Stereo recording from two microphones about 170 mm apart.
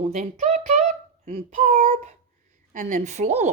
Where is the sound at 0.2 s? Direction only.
45° right (ahead or behind).